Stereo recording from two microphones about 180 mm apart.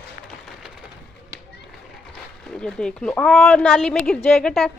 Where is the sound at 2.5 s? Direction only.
5° left (ahead or behind).